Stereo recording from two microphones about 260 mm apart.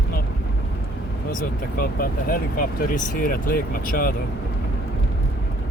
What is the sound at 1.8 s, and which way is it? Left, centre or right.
Speech, left.